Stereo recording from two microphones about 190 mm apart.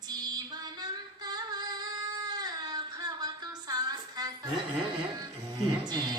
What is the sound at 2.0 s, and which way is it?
Child singing, 20° right (ahead or behind).